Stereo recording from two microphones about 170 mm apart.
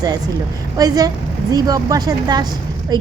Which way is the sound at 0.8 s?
20° right (ahead or behind).